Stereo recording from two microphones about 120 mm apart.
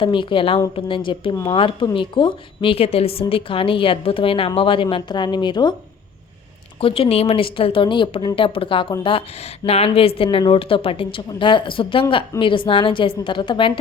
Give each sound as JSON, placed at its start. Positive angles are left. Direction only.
{"t": 0.0, "sound": "a woman's voice", "side_deg": 45}
{"t": 6.8, "sound": "a woman's voice", "side_deg": 50}